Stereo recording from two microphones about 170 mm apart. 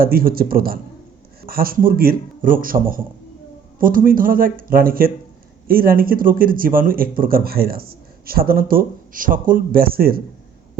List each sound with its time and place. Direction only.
0.0 s speech: 60° right (ahead or behind)